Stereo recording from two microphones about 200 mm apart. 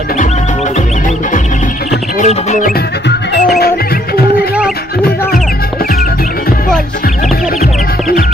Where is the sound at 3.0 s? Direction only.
55° left (ahead or behind).